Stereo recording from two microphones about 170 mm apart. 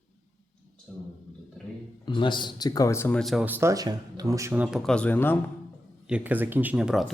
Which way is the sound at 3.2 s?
Centre (ahead or behind).